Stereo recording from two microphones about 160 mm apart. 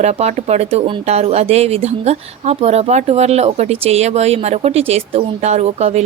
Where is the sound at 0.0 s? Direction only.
45° right (ahead or behind).